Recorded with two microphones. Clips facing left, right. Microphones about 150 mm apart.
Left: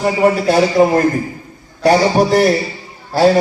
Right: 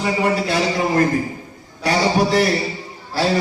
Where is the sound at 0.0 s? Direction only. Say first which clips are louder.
Left 6 dB; 45° left (ahead or behind).